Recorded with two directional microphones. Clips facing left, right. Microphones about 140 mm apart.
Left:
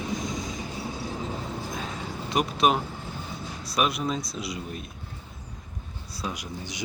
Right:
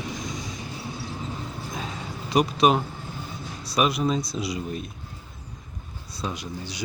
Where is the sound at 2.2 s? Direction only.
Centre (ahead or behind).